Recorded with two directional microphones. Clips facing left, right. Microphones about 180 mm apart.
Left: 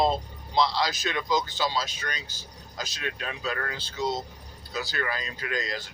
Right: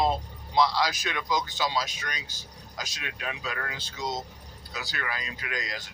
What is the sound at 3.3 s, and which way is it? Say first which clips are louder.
Speech: left 2 dB; 35° left (ahead or behind).